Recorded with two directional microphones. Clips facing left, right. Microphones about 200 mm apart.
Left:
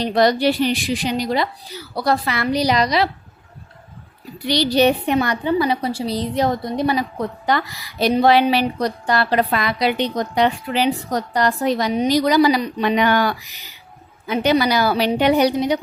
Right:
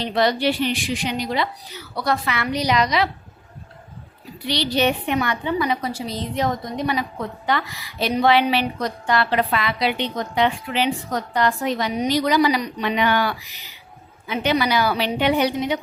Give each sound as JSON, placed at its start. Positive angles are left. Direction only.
{"t": 0.0, "sound": "a woman's voice", "side_deg": 40}
{"t": 4.4, "sound": "a woman's voice", "side_deg": 40}